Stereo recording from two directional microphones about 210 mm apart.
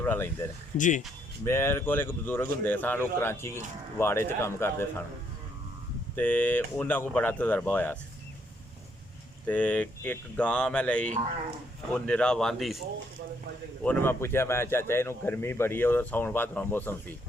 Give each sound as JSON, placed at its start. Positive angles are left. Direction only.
{"t": 0.0, "sound": "speech", "side_deg": 10}
{"t": 0.8, "sound": "speech", "side_deg": 35}
{"t": 1.5, "sound": "speech", "side_deg": 10}
{"t": 6.1, "sound": "speech", "side_deg": 10}
{"t": 9.5, "sound": "speech", "side_deg": 5}
{"t": 13.8, "sound": "speech", "side_deg": 10}